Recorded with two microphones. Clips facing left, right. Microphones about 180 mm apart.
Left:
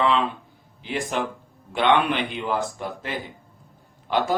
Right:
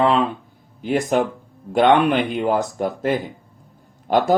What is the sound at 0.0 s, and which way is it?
Speech, 45° right (ahead or behind).